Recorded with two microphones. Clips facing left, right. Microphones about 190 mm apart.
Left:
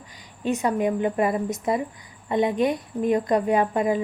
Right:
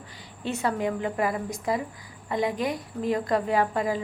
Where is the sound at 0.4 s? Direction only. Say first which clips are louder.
Left 4 dB; 15° left (ahead or behind).